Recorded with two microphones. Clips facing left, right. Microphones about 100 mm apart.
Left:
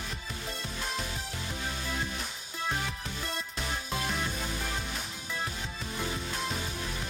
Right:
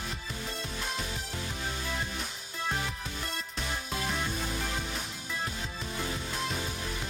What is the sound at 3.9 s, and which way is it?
Music, centre (ahead or behind).